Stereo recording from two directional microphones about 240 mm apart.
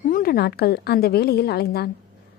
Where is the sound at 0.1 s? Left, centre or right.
Left.